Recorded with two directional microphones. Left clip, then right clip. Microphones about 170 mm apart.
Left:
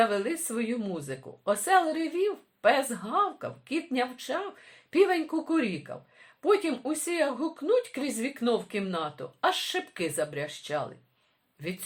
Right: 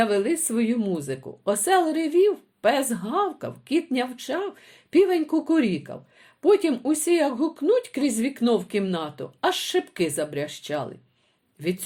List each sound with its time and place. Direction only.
0.0 s speech: 35° right (ahead or behind)